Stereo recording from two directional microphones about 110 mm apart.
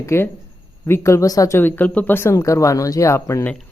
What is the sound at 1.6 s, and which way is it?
Speech, 15° left (ahead or behind).